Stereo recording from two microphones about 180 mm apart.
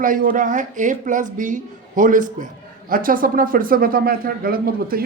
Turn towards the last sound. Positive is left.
turn(degrees=-55)  # may be behind; listen again after turning